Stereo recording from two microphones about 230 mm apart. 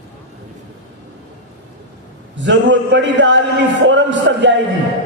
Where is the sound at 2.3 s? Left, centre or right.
Right.